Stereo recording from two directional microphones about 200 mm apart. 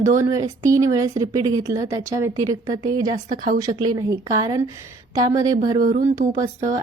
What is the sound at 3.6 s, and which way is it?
A woman's voice, 20° right (ahead or behind).